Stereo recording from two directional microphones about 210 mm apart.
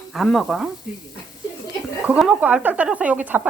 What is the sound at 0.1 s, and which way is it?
Speech, centre (ahead or behind).